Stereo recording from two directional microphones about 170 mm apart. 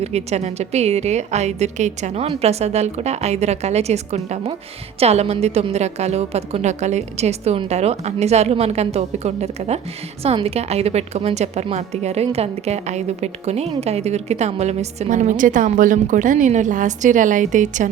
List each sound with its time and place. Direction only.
0.0 s a woman's voice: 40° right (ahead or behind)